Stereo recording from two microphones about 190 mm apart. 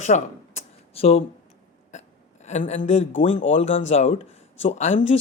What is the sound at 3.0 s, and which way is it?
Speech, 80° left.